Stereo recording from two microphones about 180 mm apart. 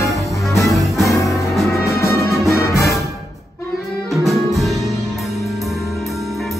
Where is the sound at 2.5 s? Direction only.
15° left (ahead or behind).